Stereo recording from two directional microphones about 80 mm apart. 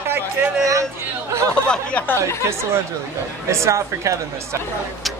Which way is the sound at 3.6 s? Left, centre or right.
Right.